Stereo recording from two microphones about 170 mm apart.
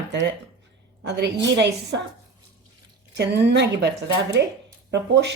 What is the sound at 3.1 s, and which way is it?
Speech, 85° right.